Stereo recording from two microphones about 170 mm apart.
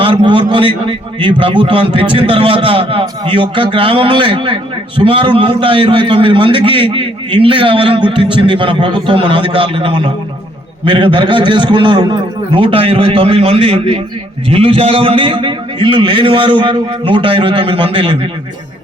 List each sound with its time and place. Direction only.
0.0 s a man's voice: 30° right (ahead or behind)